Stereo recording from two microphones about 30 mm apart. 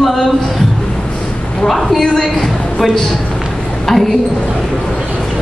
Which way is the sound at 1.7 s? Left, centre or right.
Centre.